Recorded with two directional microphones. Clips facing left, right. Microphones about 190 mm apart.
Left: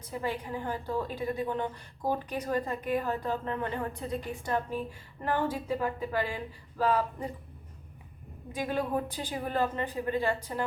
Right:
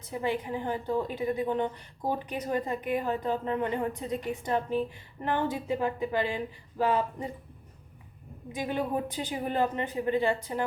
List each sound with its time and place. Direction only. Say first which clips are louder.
0.1 s a woman's voice: right 3 dB; 15° right (ahead or behind)
8.5 s a woman's voice: even; 15° right (ahead or behind)